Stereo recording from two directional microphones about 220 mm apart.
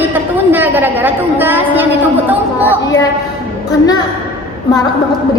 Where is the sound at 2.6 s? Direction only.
15° left (ahead or behind).